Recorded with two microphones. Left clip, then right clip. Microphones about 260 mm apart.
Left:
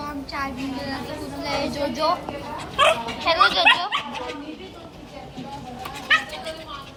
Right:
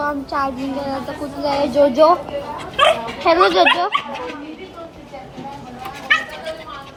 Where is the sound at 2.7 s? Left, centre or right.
Centre.